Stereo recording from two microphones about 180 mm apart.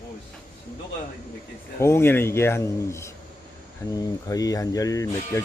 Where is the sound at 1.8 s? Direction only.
15° left (ahead or behind).